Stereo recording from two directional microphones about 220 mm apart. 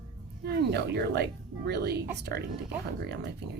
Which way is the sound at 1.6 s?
50° right (ahead or behind).